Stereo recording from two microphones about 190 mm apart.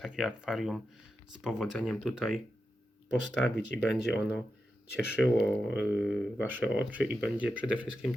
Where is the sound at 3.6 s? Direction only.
65° left (ahead or behind).